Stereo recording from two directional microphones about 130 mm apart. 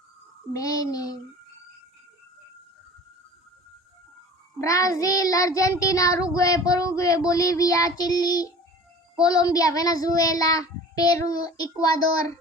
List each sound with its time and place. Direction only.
0.5 s child singing: 25° left (ahead or behind)
4.5 s child singing: 25° left (ahead or behind)